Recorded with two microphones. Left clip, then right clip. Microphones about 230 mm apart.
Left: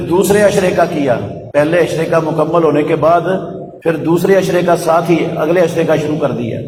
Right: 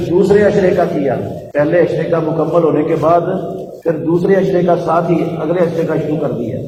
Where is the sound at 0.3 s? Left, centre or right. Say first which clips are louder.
Left 1 dB; left.